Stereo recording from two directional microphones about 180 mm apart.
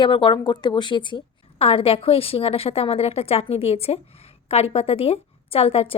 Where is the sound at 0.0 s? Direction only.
25° left (ahead or behind).